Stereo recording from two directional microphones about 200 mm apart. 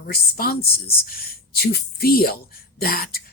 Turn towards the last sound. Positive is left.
turn(degrees=50)  # may be behind; listen again after turning